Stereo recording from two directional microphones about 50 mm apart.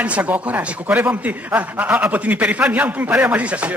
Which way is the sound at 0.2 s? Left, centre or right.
Right.